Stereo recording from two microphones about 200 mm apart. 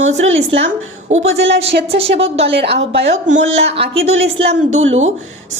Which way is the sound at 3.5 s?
30° right (ahead or behind).